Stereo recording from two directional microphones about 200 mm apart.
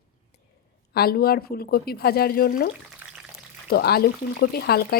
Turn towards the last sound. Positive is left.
turn(degrees=50)  # may be behind; listen again after turning